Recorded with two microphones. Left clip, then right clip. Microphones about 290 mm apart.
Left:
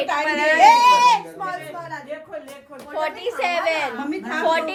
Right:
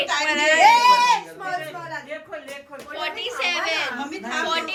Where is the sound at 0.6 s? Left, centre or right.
Left.